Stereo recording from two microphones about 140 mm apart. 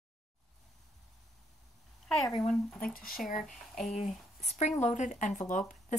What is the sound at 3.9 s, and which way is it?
Speech, 50° left (ahead or behind).